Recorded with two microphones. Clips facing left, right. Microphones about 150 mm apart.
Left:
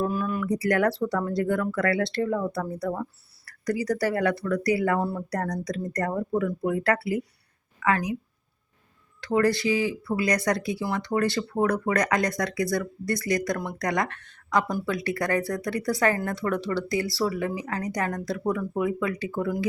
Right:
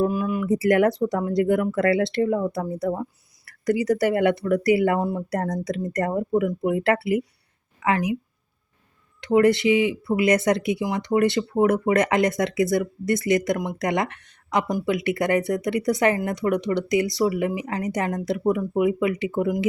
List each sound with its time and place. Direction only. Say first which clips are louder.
0.0 s speech: right 4 dB; 15° right (ahead or behind)
9.2 s speech: right 5 dB; 20° right (ahead or behind)